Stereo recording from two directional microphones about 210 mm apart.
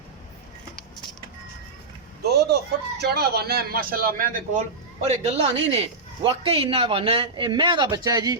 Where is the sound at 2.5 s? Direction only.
50° right (ahead or behind).